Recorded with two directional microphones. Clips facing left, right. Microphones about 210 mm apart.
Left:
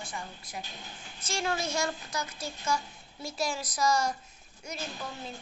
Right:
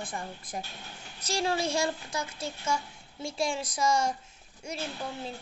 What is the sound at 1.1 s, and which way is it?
A woman's voice, 35° right (ahead or behind).